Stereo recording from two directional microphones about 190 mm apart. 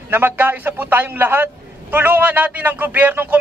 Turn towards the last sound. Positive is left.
turn(degrees=-10)  # may be behind; listen again after turning